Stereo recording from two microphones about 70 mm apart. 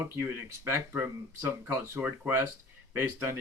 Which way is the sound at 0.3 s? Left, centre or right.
Right.